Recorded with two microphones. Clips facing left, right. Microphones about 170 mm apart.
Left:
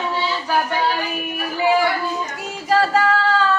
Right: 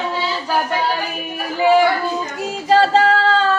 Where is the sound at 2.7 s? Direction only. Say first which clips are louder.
Right 3 dB; 25° right (ahead or behind).